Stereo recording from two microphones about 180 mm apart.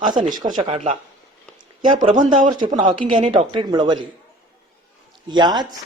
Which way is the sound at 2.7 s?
45° right (ahead or behind).